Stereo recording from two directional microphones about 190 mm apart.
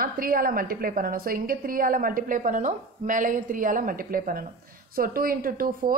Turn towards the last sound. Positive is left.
turn(degrees=-50)  # may be behind; listen again after turning